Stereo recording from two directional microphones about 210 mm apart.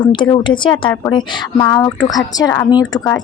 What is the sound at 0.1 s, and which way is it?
A woman's voice, 25° left (ahead or behind).